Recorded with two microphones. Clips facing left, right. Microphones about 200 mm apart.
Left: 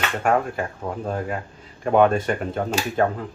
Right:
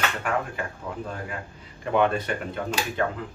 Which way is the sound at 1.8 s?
50° left (ahead or behind).